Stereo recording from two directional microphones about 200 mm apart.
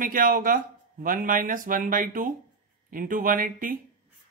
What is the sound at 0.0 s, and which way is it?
Speech, 45° right (ahead or behind).